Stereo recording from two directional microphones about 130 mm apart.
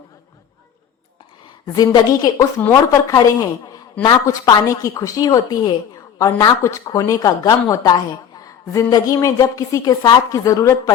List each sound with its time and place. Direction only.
1.6 s speech: 30° left (ahead or behind)